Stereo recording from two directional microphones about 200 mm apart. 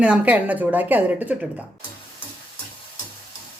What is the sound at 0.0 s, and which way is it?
Speech, 5° right (ahead or behind).